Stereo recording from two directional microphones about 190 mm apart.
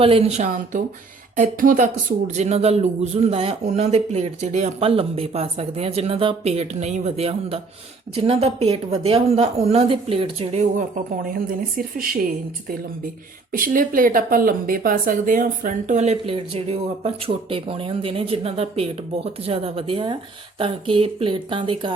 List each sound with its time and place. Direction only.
0.0 s speech: 30° right (ahead or behind); by 12.1 s 50° right (ahead or behind)
13.5 s speech: 45° right (ahead or behind); by 21.9 s 25° right (ahead or behind)